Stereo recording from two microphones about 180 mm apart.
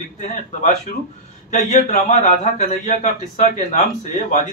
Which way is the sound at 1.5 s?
40° left (ahead or behind).